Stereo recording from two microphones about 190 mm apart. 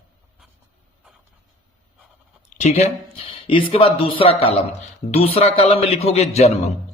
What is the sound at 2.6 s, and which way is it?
A man's voice, 35° left (ahead or behind).